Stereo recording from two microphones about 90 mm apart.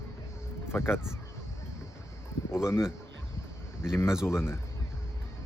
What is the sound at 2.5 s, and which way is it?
Speech, 30° left (ahead or behind).